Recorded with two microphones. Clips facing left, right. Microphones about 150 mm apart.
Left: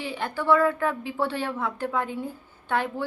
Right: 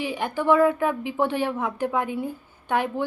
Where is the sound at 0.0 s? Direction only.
15° right (ahead or behind).